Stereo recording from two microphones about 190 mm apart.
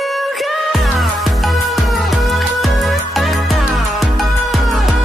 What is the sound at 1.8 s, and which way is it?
Music, centre (ahead or behind).